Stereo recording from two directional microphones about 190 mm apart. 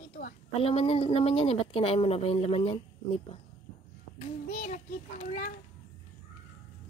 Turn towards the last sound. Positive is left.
turn(degrees=40)  # may be behind; listen again after turning